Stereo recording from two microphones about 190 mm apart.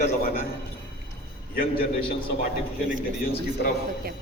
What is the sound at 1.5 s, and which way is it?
Speech, 50° left (ahead or behind).